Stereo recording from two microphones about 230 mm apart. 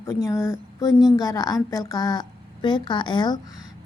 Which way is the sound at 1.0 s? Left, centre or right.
Centre.